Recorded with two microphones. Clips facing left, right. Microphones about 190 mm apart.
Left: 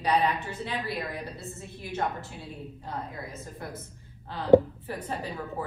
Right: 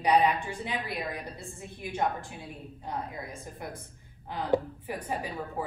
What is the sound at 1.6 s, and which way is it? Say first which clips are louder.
A woman's voice: right 1 dB; 20° right (ahead or behind).